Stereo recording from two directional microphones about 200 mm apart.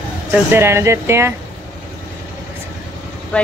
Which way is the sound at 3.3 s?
5° left (ahead or behind).